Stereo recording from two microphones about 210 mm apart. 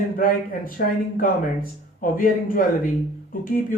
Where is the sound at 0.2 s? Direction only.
40° left (ahead or behind).